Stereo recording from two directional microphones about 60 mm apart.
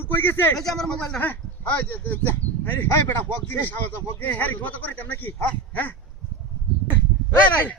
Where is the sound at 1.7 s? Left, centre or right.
Left.